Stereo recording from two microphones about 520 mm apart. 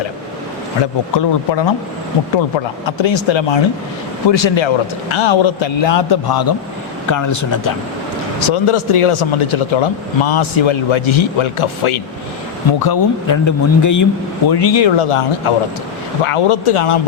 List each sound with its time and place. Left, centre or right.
1.1 s speech: left
2.8 s speech: left
7.1 s a man's voice: left
8.4 s speech: left
12.8 s a man's voice: left
14.5 s speech: left